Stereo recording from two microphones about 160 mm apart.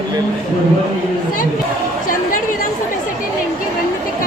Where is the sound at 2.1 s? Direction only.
60° left (ahead or behind).